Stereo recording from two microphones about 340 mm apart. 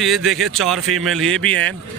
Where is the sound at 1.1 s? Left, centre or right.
Centre.